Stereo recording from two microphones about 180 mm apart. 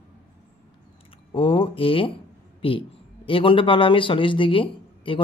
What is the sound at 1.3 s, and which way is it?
Speech, 30° left (ahead or behind).